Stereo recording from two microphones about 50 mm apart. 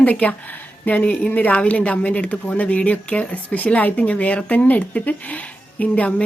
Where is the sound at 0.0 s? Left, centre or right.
Left.